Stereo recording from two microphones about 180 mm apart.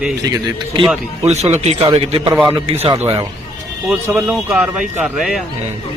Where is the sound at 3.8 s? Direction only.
5° right (ahead or behind).